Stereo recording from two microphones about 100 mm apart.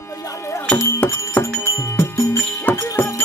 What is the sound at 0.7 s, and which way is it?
Music, 20° left (ahead or behind).